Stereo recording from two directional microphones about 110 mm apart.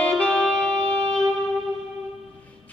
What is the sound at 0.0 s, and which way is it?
Music, 10° left (ahead or behind).